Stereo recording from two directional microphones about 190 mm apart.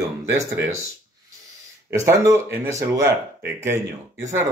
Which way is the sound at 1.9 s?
15° right (ahead or behind).